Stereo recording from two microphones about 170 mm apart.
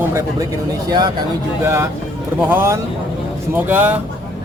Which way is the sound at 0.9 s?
25° right (ahead or behind).